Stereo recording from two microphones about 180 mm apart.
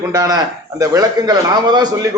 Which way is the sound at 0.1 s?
20° right (ahead or behind).